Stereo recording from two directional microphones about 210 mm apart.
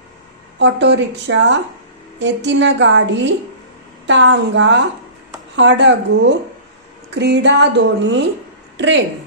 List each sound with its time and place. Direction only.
0.6 s a woman's voice: 55° right (ahead or behind)